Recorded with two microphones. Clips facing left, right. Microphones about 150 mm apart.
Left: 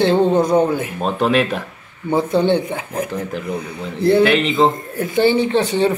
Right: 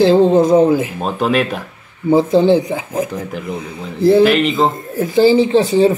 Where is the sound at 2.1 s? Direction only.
90° right.